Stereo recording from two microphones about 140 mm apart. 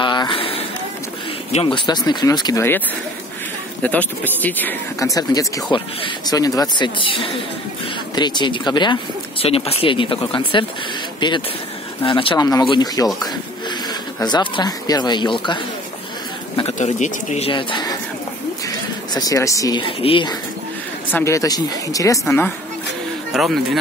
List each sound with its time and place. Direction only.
0.0 s a sound: 35° left (ahead or behind)
1.5 s speech: 40° left (ahead or behind)
3.8 s speech: 10° left (ahead or behind)
5.1 s speech: 25° left (ahead or behind)
14.2 s speech: 35° left (ahead or behind)
16.7 s speech: 60° left (ahead or behind)
17.5 s speech: 35° left (ahead or behind)
19.1 s speech: 25° left (ahead or behind)
19.8 s speech: 40° left (ahead or behind)
21.1 s speech: 20° left (ahead or behind)
23.3 s speech: centre (ahead or behind)